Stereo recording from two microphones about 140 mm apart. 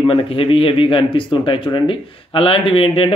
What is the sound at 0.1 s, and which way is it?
Speech, 40° left (ahead or behind).